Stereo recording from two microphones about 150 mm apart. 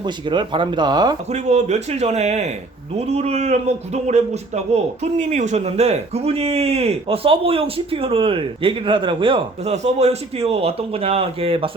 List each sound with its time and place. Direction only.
0.0 s a man's voice: 30° right (ahead or behind)
1.3 s speech: 50° right (ahead or behind)
9.7 s a man's voice: 45° right (ahead or behind)